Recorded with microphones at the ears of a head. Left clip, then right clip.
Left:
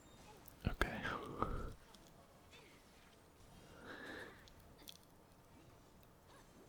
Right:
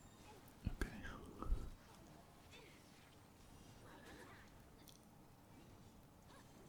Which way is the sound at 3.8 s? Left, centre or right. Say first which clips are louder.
Left 10 dB; left.